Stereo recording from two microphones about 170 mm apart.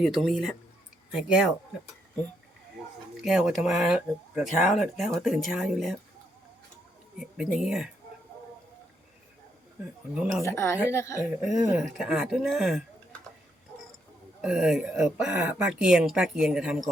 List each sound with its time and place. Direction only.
0.0 s speech: centre (ahead or behind)
3.2 s speech: 5° right (ahead or behind)
7.2 s speech: 5° right (ahead or behind)
10.4 s a woman's voice: 15° left (ahead or behind)
11.4 s speech: 5° right (ahead or behind)
14.4 s speech: 5° right (ahead or behind)